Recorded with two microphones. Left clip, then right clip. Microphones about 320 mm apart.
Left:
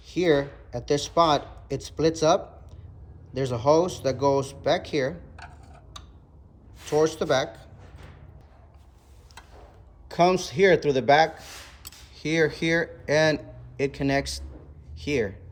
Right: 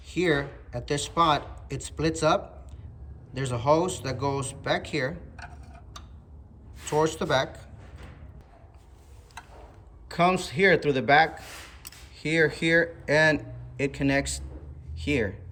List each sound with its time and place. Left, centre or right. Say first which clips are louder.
0.1 s speech: left 3 dB; centre
6.9 s speech: left 2 dB; centre
10.1 s speech: left 2 dB; centre